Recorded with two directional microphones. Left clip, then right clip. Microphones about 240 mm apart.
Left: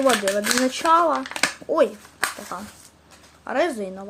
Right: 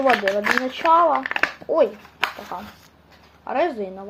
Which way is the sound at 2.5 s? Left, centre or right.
Left.